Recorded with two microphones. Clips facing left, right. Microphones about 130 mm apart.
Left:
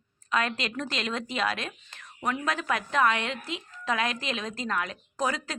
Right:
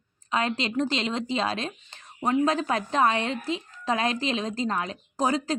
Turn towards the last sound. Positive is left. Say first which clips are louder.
# right 5 dB
turn(degrees=-30)  # may be behind; listen again after turning